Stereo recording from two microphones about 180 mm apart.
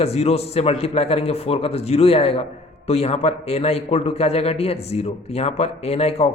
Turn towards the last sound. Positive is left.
turn(degrees=35)  # may be behind; listen again after turning